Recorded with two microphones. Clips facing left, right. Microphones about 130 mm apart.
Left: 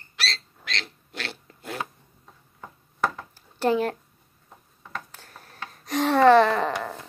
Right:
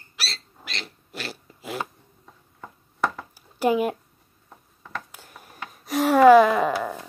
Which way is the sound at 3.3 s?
10° right (ahead or behind).